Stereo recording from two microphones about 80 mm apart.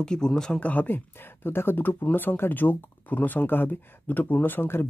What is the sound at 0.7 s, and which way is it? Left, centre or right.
Speech, left.